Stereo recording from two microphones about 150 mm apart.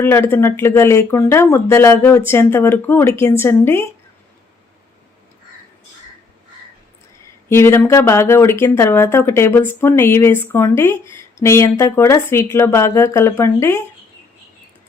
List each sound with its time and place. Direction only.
0.0 s speech: 15° left (ahead or behind)
7.5 s speech: 15° left (ahead or behind)